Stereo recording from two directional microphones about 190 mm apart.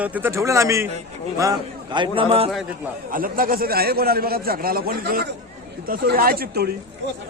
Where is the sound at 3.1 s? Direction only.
50° right (ahead or behind).